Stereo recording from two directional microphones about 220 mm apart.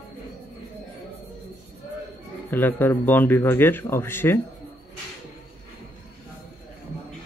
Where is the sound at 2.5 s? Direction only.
10° left (ahead or behind).